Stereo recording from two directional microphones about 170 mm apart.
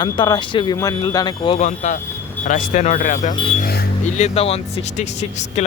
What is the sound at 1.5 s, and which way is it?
Speech, 40° left (ahead or behind).